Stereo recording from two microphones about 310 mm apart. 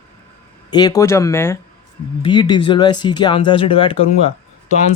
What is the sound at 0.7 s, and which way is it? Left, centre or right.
Speech, centre.